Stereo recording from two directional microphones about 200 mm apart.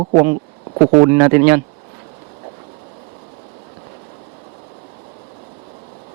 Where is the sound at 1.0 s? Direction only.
20° right (ahead or behind).